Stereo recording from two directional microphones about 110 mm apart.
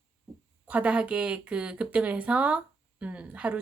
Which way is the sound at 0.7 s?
10° right (ahead or behind).